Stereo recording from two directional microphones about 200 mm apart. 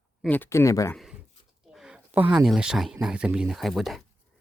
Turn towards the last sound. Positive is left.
turn(degrees=0)  # may be behind; listen again after turning